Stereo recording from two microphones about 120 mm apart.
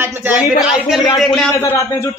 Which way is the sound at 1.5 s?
25° left (ahead or behind).